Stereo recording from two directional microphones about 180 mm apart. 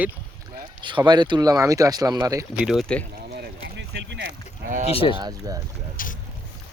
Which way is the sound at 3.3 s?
75° right (ahead or behind).